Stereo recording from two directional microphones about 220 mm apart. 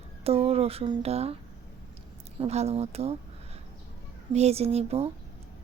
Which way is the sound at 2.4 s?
30° right (ahead or behind).